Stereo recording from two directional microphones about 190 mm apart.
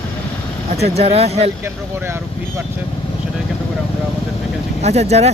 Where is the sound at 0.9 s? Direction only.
35° right (ahead or behind).